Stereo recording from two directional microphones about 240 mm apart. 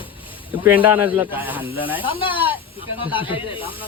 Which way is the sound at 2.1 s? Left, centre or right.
Left.